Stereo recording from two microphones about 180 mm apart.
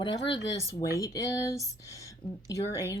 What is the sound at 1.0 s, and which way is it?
Speech, 20° left (ahead or behind).